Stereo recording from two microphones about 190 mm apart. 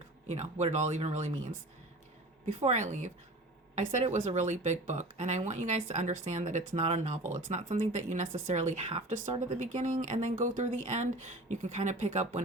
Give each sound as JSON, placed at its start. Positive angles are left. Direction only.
{"t": 0.3, "sound": "speech", "side_deg": -35}